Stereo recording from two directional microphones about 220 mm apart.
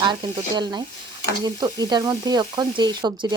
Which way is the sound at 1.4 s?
20° right (ahead or behind).